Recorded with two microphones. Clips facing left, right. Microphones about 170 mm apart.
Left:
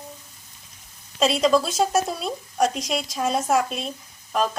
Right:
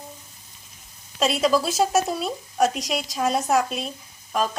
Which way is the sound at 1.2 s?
Centre (ahead or behind).